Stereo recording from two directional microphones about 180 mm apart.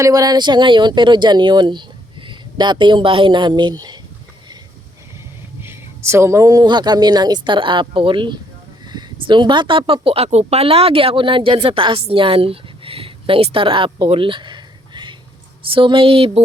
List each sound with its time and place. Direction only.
0.0 s speech: 20° right (ahead or behind)
5.6 s speech: 15° right (ahead or behind); by 16.4 s 30° right (ahead or behind)